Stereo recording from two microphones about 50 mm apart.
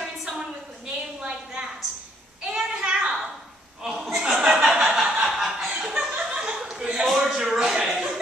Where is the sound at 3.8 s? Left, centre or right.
Centre.